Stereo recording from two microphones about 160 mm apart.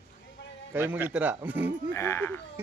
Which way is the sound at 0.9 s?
10° right (ahead or behind).